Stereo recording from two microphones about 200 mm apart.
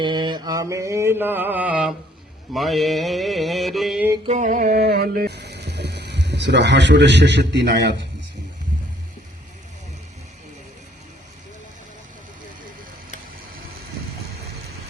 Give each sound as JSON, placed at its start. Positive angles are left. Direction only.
{"t": 0.0, "sound": "mantra", "side_deg": -25}
{"t": 4.3, "sound": "music", "side_deg": -40}